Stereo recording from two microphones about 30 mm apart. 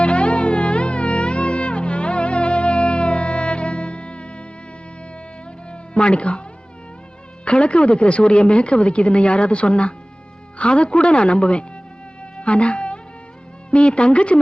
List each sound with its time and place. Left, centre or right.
0.0 s music: left
5.7 s a sound: left
7.4 s a woman's voice: left
12.4 s music: left
13.7 s a woman's voice: left